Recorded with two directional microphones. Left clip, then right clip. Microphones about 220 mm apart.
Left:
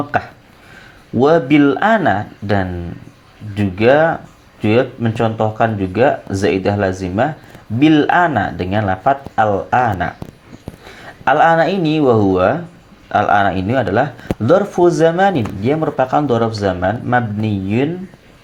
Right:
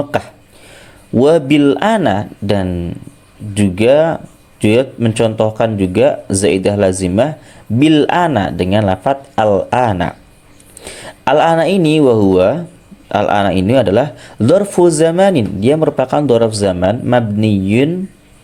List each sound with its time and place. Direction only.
0.1 s speech: 40° right (ahead or behind)